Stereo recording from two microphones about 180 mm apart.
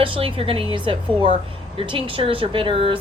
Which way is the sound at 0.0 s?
30° right (ahead or behind).